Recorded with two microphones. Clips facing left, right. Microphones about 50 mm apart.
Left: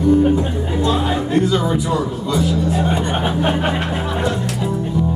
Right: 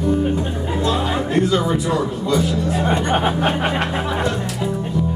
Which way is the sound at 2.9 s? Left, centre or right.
Right.